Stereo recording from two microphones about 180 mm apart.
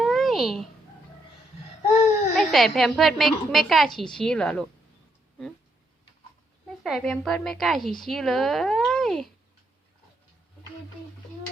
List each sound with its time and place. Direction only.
0.0 s a sound: centre (ahead or behind)
2.3 s a woman's voice: centre (ahead or behind)
6.8 s a woman's voice: centre (ahead or behind)